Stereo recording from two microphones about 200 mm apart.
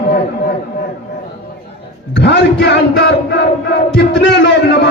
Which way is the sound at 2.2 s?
55° left (ahead or behind).